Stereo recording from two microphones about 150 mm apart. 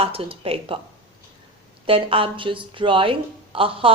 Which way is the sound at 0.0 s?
40° right (ahead or behind).